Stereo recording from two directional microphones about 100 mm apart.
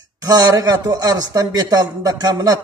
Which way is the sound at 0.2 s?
40° right (ahead or behind).